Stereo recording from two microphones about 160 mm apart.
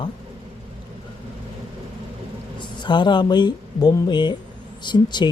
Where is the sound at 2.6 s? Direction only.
30° left (ahead or behind).